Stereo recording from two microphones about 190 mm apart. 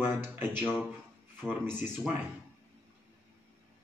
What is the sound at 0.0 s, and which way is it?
Speech, 10° right (ahead or behind).